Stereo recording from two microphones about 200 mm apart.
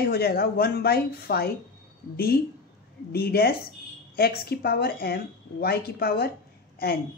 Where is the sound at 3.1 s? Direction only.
50° left (ahead or behind).